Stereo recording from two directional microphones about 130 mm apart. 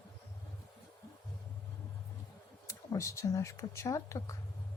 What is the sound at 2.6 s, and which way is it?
Speech, 25° left (ahead or behind).